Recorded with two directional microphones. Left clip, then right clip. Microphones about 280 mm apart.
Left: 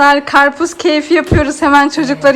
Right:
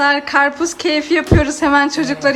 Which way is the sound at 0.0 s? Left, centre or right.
Centre.